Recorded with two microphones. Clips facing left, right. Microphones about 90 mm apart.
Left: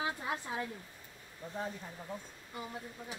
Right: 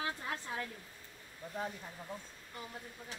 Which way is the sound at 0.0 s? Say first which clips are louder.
Left 3 dB; 15° left (ahead or behind).